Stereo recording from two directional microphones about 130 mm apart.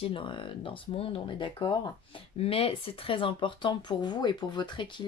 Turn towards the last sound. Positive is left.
turn(degrees=35)  # may be behind; listen again after turning